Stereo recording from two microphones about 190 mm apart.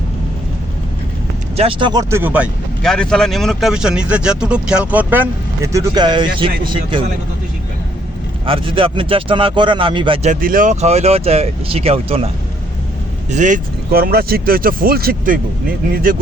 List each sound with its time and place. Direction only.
1.5 s speech: 30° right (ahead or behind); by 2.5 s 10° right (ahead or behind)
2.8 s speech: 5° left (ahead or behind); by 7.0 s 25° right (ahead or behind)
8.4 s speech: 30° right (ahead or behind)
10.2 s speech: 45° right (ahead or behind)
13.3 s speech: 40° right (ahead or behind)